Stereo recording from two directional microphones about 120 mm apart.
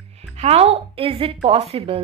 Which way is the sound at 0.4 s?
60° right (ahead or behind).